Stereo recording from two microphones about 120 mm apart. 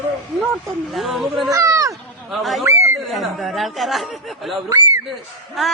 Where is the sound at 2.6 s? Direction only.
25° right (ahead or behind).